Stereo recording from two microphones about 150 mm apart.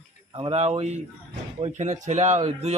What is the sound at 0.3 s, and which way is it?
Speech, 40° right (ahead or behind).